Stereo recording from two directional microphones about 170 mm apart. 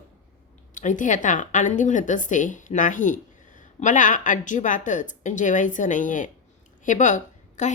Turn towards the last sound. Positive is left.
turn(degrees=45)  # may be behind; listen again after turning